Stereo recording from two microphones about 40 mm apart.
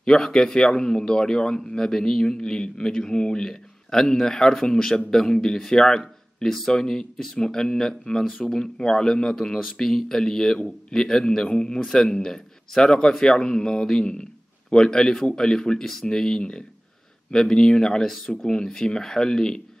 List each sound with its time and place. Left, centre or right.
0.0 s speech: centre